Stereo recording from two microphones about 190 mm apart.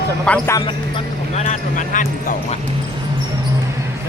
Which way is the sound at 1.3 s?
35° left (ahead or behind).